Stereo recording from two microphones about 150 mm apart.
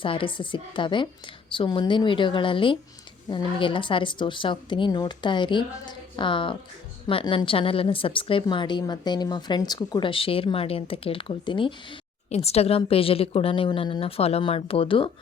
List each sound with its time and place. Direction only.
0.0 s a woman's voice: 35° left (ahead or behind)
12.3 s a woman's voice: 45° left (ahead or behind)